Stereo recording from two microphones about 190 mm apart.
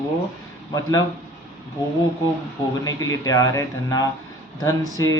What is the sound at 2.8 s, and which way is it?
A man's voice, 15° left (ahead or behind).